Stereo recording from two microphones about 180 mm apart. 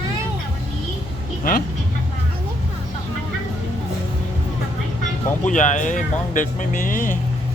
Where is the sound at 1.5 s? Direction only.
50° left (ahead or behind).